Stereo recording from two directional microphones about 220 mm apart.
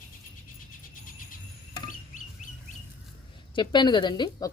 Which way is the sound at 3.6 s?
20° left (ahead or behind).